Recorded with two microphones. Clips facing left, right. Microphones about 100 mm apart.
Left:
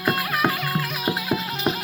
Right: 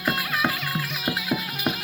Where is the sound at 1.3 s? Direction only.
5° right (ahead or behind).